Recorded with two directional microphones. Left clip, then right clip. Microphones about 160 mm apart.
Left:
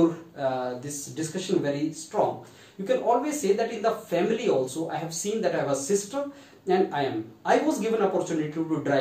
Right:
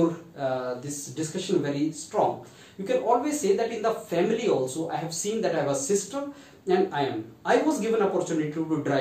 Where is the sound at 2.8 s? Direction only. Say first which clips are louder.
Even; 15° right (ahead or behind).